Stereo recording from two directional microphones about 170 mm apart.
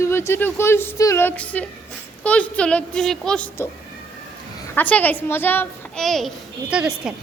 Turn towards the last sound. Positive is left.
turn(degrees=-5)  # may be behind; listen again after turning